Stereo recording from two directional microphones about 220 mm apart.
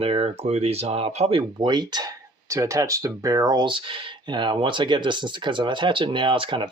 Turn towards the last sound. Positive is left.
turn(degrees=-25)  # may be behind; listen again after turning